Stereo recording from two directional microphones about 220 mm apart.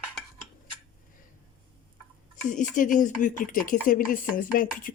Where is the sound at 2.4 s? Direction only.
35° left (ahead or behind).